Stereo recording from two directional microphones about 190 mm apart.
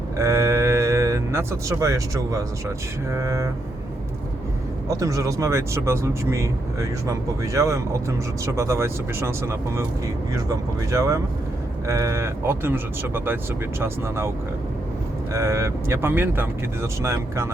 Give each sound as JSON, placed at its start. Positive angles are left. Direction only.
{"t": 0.2, "sound": "speech", "side_deg": -15}
{"t": 4.9, "sound": "speech", "side_deg": -15}